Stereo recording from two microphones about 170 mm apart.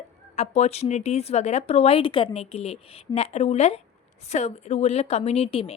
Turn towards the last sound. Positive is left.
turn(degrees=35)  # may be behind; listen again after turning